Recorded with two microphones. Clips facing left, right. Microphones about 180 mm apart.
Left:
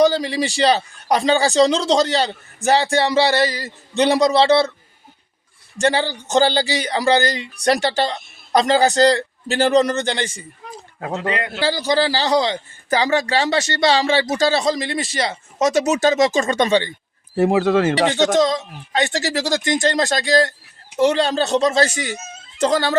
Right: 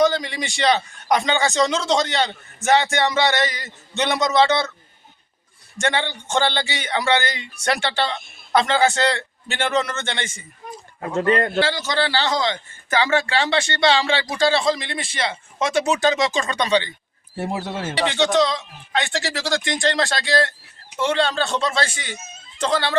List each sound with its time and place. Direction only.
0.0 s a man's voice: 35° left (ahead or behind)
5.7 s a man's voice: 35° left (ahead or behind)
11.2 s a man's voice: 50° right (ahead or behind)
11.6 s a man's voice: 35° left (ahead or behind)
17.3 s speech: 90° left
18.0 s a man's voice: 40° left (ahead or behind)